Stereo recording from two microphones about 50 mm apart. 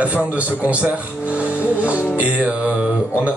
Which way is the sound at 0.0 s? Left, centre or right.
Right.